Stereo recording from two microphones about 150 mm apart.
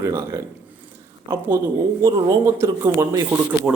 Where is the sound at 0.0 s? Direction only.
20° right (ahead or behind).